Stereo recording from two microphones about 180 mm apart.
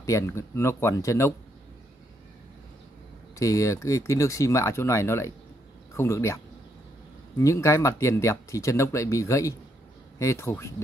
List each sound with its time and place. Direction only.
0.0 s speech: 15° left (ahead or behind)
3.3 s speech: 20° left (ahead or behind)